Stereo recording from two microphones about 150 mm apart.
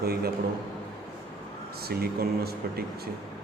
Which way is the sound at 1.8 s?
90° right.